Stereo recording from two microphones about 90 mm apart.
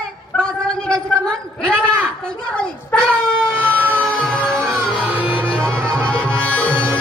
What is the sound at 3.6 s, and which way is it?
Emergency vehicle, 15° left (ahead or behind).